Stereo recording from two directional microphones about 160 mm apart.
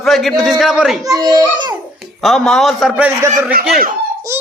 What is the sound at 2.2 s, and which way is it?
A man's voice, centre (ahead or behind).